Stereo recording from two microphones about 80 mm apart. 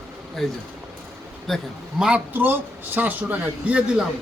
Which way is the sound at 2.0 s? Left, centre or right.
Centre.